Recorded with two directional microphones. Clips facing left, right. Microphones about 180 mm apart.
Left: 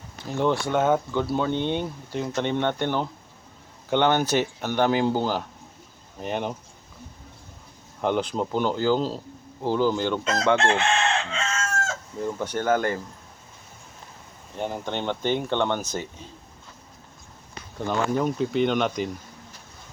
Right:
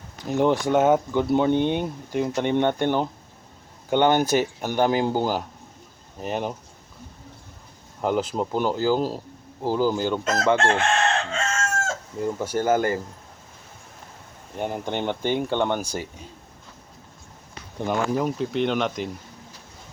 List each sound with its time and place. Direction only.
0.3 s speech: 20° right (ahead or behind)
8.0 s speech: 5° right (ahead or behind)
10.6 s chicken: 45° right (ahead or behind)
12.2 s speech: 10° right (ahead or behind)
14.6 s speech: 15° right (ahead or behind)
18.1 s speech: 5° right (ahead or behind)